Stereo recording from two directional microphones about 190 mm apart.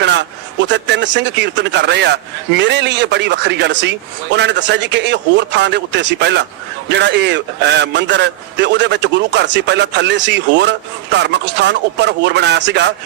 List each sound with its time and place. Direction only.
0.0 s a man's voice: 65° right (ahead or behind)